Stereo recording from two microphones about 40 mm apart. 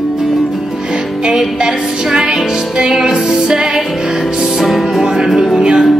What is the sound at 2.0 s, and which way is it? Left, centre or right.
Music, centre.